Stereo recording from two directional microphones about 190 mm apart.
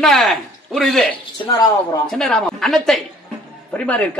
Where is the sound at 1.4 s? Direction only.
20° left (ahead or behind).